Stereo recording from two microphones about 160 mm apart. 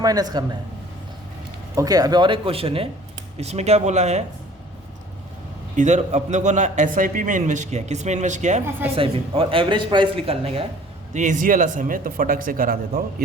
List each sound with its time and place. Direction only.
0.0 s a man's voice: 25° right (ahead or behind)
1.7 s a man's voice: 20° right (ahead or behind); by 4.2 s 45° right (ahead or behind)
5.7 s a man's voice: 50° right (ahead or behind)
9.0 s speech: 35° right (ahead or behind)
11.1 s speech: 50° right (ahead or behind)